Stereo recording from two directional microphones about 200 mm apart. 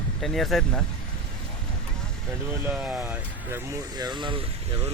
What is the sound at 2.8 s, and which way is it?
Speech, 10° right (ahead or behind).